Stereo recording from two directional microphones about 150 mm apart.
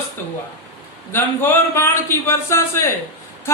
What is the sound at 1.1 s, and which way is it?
A man's voice, 15° left (ahead or behind).